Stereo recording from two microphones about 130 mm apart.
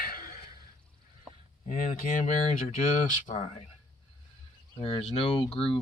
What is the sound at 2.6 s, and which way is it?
Speech, 70° left (ahead or behind).